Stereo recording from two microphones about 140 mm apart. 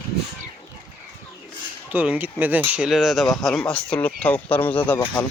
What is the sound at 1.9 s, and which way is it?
Speech, 10° right (ahead or behind).